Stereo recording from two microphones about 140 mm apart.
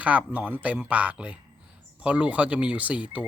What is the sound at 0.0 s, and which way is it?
Speech, 10° right (ahead or behind).